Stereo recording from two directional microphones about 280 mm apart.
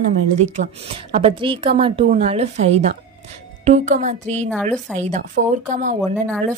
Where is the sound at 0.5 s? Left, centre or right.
Right.